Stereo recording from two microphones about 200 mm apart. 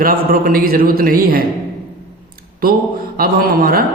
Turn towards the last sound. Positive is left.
turn(degrees=-45)  # may be behind; listen again after turning